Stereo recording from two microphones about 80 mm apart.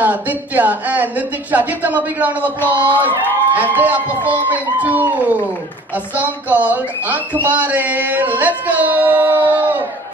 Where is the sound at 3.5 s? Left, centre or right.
Right.